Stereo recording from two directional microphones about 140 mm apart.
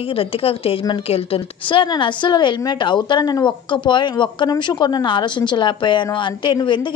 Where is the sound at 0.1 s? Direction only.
40° left (ahead or behind).